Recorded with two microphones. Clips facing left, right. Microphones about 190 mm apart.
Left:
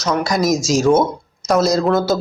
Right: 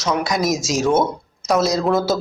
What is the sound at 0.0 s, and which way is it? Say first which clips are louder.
Speech: left 2 dB; centre (ahead or behind).